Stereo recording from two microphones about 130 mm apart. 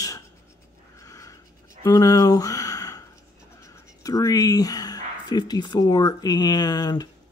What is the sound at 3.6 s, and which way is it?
Speech, 25° left (ahead or behind).